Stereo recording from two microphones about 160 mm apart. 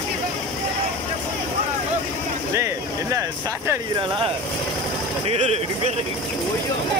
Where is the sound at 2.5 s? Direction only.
20° right (ahead or behind).